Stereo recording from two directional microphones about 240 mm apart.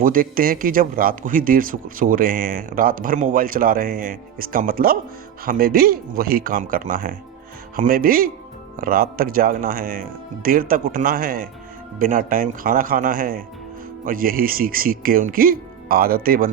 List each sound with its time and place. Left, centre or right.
0.0 s speech: right